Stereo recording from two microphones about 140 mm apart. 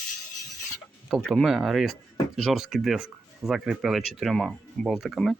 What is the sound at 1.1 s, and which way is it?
Speech, centre (ahead or behind).